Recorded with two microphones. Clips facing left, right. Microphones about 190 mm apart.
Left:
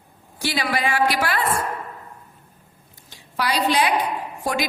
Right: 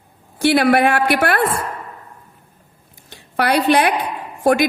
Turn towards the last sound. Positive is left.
turn(degrees=-55)  # may be behind; listen again after turning